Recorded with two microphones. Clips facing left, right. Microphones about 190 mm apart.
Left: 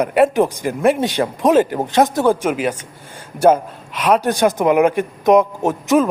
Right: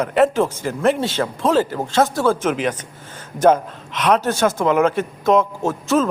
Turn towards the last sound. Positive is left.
turn(degrees=15)  # may be behind; listen again after turning